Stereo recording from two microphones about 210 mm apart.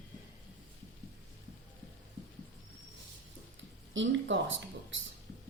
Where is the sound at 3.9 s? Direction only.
60° right (ahead or behind).